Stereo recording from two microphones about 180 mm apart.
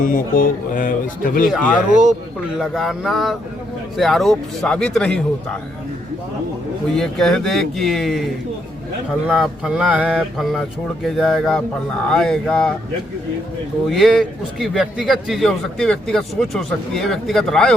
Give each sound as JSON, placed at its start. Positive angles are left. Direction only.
{"t": 0.0, "sound": "a man's voice", "side_deg": 50}
{"t": 1.5, "sound": "a man's voice", "side_deg": 0}
{"t": 6.9, "sound": "a man's voice", "side_deg": 5}
{"t": 9.2, "sound": "a man's voice", "side_deg": -5}
{"t": 13.9, "sound": "a man's voice", "side_deg": 0}